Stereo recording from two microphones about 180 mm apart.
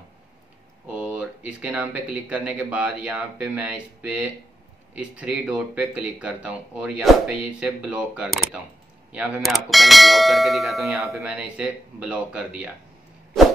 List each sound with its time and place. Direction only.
0.9 s speech: 5° right (ahead or behind)
9.1 s bell: 5° right (ahead or behind)